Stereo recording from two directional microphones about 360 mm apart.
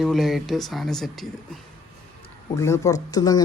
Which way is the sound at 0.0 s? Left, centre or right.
Centre.